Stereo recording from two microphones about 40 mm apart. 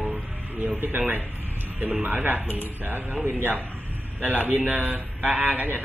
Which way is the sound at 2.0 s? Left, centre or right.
Right.